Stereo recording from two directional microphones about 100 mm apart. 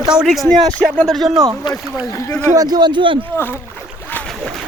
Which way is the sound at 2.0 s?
30° left (ahead or behind).